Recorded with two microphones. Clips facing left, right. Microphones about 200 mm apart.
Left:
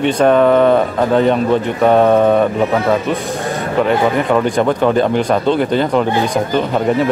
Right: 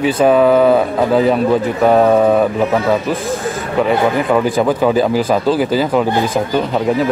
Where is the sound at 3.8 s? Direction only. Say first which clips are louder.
Even; centre (ahead or behind).